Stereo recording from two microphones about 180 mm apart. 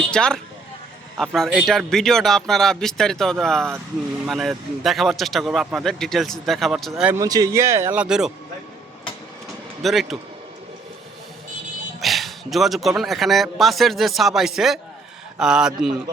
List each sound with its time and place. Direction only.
0.1 s speech: 5° left (ahead or behind)
6.9 s speech: 15° right (ahead or behind)
8.0 s speech: 5° right (ahead or behind)
9.8 s speech: centre (ahead or behind)
11.9 s speech: centre (ahead or behind)